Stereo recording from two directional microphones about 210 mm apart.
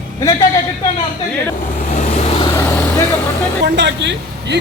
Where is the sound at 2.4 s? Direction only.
15° left (ahead or behind).